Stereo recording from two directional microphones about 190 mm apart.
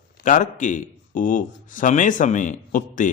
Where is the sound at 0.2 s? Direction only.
45° left (ahead or behind).